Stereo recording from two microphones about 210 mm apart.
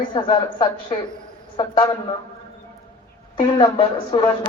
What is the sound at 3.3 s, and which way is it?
Speech, 25° left (ahead or behind).